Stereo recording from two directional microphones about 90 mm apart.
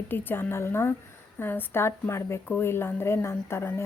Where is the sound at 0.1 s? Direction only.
25° left (ahead or behind).